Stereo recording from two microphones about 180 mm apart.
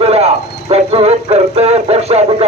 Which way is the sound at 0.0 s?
35° right (ahead or behind).